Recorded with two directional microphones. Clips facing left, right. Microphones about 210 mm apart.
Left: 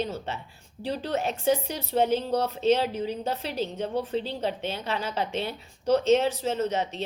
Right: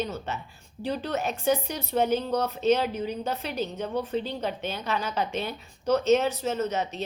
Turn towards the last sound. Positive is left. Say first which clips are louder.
# left 1 dB
turn(degrees=30)  # may be behind; listen again after turning